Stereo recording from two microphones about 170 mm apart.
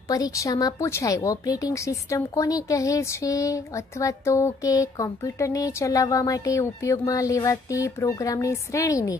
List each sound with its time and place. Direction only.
0.1 s speech: 20° left (ahead or behind)